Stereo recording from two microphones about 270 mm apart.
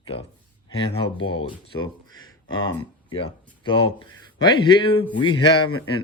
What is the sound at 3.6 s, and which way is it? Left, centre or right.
Speech, centre.